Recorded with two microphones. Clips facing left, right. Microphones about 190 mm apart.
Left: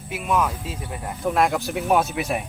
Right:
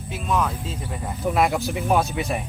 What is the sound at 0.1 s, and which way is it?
Speech, 10° left (ahead or behind).